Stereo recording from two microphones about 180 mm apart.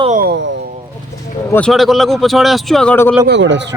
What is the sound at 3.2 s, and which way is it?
Speech, 80° right.